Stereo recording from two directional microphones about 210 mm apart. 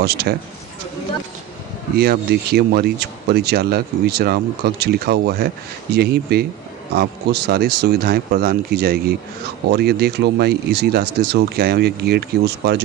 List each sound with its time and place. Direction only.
0.0 s speech: 50° right (ahead or behind)
2.0 s speech: 50° right (ahead or behind)